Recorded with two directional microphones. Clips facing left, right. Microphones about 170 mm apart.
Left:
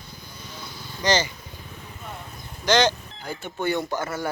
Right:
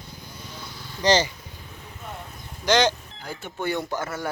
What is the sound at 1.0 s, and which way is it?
Chicken, 35° right (ahead or behind).